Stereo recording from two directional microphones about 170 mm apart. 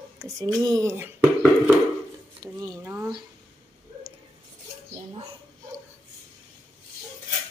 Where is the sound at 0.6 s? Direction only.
20° right (ahead or behind).